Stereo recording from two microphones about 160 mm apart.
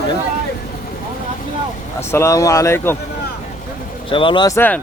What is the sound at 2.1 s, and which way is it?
Speech, 15° left (ahead or behind).